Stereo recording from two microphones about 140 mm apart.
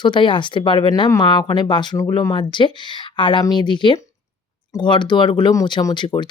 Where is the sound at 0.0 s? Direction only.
35° left (ahead or behind).